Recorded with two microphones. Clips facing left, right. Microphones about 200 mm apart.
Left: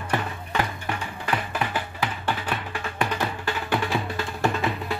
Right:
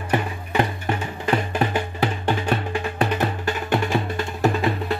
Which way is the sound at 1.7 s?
25° right (ahead or behind).